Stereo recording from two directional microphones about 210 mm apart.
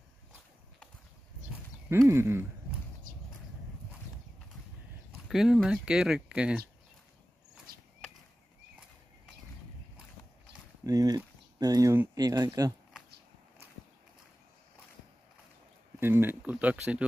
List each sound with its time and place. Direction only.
1.5 s horse: 10° right (ahead or behind)
3.1 s a sound: 40° right (ahead or behind)
5.1 s speech: 5° right (ahead or behind)
10.8 s speech: 15° right (ahead or behind)
16.0 s speech: 10° right (ahead or behind)